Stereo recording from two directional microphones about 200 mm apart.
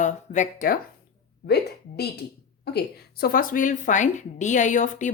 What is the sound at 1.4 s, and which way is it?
A woman's voice, 55° left (ahead or behind).